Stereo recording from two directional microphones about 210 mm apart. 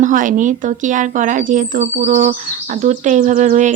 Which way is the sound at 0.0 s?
40° right (ahead or behind).